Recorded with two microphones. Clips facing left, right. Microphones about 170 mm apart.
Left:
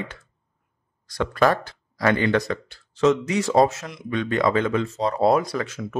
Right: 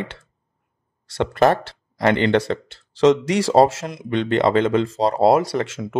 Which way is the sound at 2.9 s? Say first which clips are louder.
Right 4 dB; 90° right.